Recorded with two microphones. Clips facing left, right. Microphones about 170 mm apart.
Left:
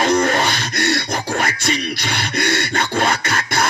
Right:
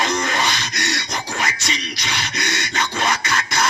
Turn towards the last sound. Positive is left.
turn(degrees=55)  # may be behind; listen again after turning